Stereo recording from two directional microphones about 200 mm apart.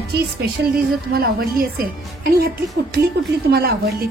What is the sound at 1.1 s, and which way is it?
A woman's voice, 50° right (ahead or behind).